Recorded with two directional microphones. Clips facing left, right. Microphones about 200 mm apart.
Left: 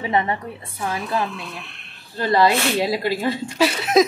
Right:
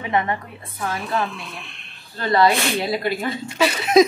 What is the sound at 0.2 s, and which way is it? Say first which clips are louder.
Speech: left 1 dB; 25° left (ahead or behind).